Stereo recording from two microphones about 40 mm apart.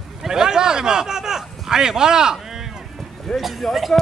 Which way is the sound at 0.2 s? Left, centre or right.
Centre.